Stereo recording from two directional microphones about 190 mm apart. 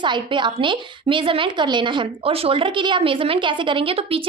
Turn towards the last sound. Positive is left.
turn(degrees=-30)  # may be behind; listen again after turning